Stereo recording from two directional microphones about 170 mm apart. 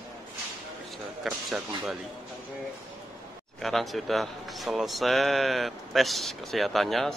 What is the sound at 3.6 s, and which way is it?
Speech, centre (ahead or behind).